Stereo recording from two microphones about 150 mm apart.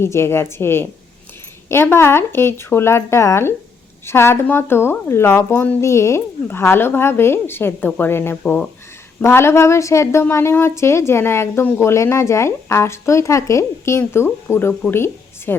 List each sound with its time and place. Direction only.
0.0 s speech: 15° left (ahead or behind)